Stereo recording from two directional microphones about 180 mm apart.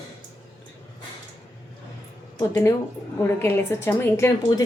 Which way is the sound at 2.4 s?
15° left (ahead or behind).